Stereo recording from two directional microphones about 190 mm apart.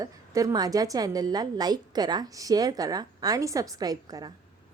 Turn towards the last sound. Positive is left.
turn(degrees=-20)  # may be behind; listen again after turning